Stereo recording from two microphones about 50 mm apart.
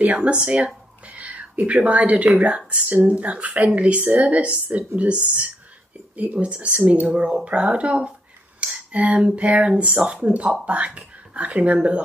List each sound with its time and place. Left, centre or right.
0.0 s speech: right
7.1 s speech: centre
7.4 s speech: right